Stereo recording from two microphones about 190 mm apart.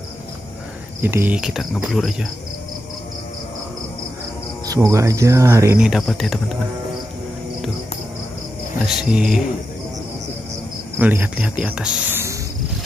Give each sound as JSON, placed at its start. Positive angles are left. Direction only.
{"t": 1.0, "sound": "cricket", "side_deg": -10}
{"t": 4.6, "sound": "speech", "side_deg": -15}
{"t": 5.8, "sound": "cricket", "side_deg": 0}
{"t": 8.8, "sound": "cricket", "side_deg": -5}
{"t": 11.0, "sound": "speech", "side_deg": -10}